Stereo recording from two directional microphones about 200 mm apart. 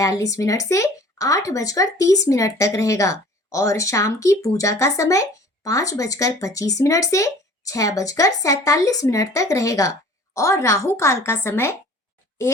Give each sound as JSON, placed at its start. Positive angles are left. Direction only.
{"t": 0.0, "sound": "speech", "side_deg": 15}